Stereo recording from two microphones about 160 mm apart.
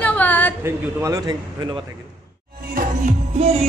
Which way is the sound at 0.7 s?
20° right (ahead or behind).